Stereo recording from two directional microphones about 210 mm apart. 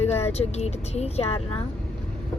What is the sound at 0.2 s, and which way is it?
Speech, 30° left (ahead or behind).